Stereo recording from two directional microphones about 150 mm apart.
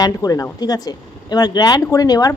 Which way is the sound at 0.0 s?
25° left (ahead or behind).